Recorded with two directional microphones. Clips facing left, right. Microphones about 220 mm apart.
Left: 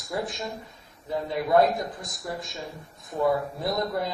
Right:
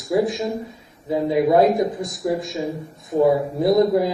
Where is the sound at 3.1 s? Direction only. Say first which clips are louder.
Right 8 dB; 25° right (ahead or behind).